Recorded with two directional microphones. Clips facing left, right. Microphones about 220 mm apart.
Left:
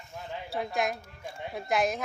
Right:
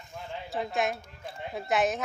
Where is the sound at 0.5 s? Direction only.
Centre (ahead or behind).